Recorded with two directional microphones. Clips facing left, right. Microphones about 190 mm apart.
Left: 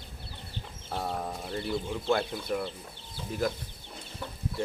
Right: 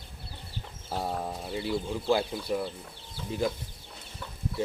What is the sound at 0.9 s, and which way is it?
Speech, 5° right (ahead or behind).